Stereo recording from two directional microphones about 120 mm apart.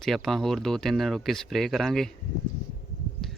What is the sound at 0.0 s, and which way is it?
Speech, centre (ahead or behind).